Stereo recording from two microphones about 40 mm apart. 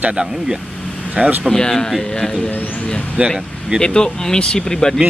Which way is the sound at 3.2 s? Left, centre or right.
Right.